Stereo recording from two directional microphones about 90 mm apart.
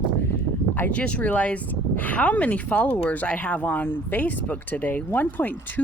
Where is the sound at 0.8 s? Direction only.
15° left (ahead or behind).